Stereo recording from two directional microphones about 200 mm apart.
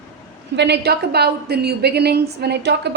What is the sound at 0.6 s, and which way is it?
A woman's voice, 55° right (ahead or behind).